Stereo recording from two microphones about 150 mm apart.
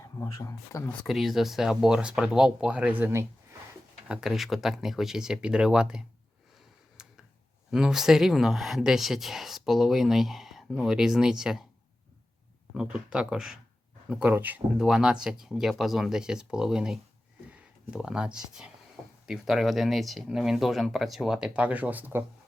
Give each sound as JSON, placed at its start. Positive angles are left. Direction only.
{"t": 0.0, "sound": "speech", "side_deg": 20}
{"t": 0.9, "sound": "speech", "side_deg": 0}
{"t": 4.1, "sound": "speech", "side_deg": -5}
{"t": 7.0, "sound": "tick-tock", "side_deg": -5}
{"t": 7.7, "sound": "speech", "side_deg": -5}
{"t": 12.7, "sound": "speech", "side_deg": -5}